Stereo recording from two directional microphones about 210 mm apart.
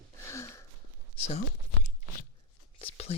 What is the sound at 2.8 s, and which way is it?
Speech, 30° left (ahead or behind).